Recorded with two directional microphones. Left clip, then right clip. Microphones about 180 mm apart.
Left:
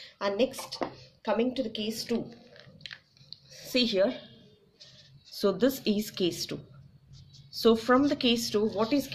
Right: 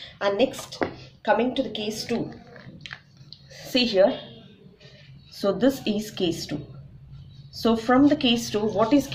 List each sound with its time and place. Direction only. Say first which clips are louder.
0.0 s speech: right 6 dB; 30° left (ahead or behind)
2.8 s biting: right 4 dB; 40° left (ahead or behind)
3.3 s a sound: right 4 dB; 35° left (ahead or behind)
5.3 s a woman's voice: right 4 dB; 45° left (ahead or behind)
7.5 s a woman's voice: right 2 dB; 45° left (ahead or behind); by 9.0 s 30° left (ahead or behind)